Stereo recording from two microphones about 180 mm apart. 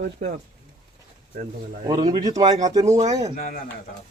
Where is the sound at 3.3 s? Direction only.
50° left (ahead or behind).